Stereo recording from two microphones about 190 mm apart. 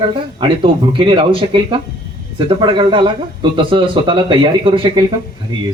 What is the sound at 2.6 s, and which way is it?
A man's voice, 25° right (ahead or behind).